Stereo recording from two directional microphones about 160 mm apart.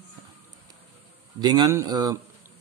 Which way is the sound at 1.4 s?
25° right (ahead or behind).